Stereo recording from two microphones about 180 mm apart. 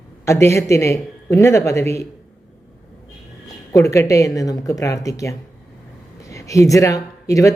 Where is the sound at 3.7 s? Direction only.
15° left (ahead or behind).